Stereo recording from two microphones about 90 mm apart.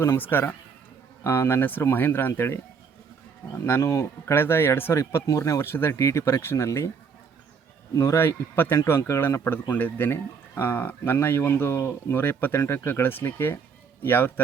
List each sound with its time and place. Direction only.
0.0 s speech: 25° left (ahead or behind)
7.9 s speech: 30° left (ahead or behind)